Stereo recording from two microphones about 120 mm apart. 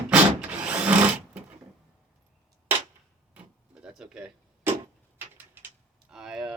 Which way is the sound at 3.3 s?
5° right (ahead or behind).